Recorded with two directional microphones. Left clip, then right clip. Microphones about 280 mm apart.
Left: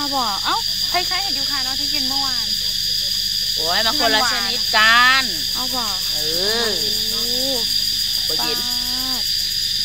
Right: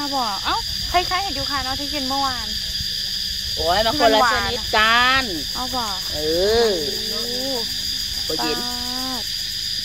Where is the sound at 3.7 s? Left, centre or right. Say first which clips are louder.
Right 2 dB; right.